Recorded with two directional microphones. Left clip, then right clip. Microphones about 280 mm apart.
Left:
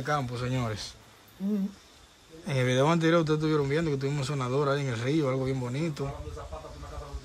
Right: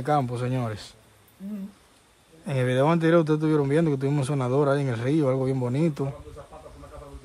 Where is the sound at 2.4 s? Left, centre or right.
Centre.